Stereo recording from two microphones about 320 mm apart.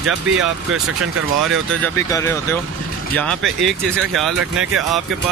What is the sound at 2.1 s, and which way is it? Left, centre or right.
Speech, centre.